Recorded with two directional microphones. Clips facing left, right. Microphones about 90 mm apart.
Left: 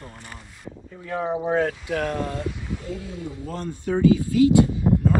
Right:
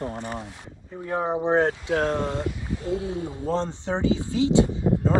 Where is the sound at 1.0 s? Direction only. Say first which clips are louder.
Right 1 dB; 25° right (ahead or behind).